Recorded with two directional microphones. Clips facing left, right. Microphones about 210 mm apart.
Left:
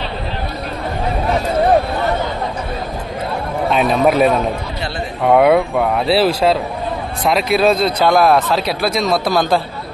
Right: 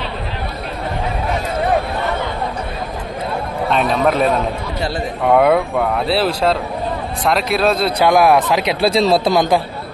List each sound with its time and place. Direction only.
3.7 s speech: 5° left (ahead or behind); by 8.7 s 15° right (ahead or behind)
8.8 s a man's voice: 30° right (ahead or behind)